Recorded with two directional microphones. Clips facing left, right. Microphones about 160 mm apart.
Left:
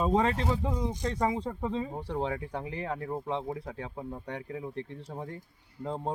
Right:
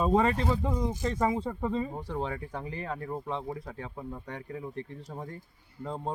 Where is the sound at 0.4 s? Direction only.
15° left (ahead or behind).